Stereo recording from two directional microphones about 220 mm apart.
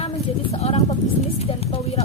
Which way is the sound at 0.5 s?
30° left (ahead or behind).